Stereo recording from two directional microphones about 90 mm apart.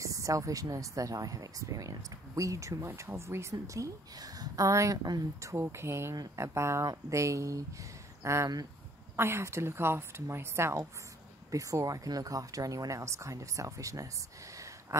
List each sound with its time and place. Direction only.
0.0 s a woman's voice: 35° right (ahead or behind)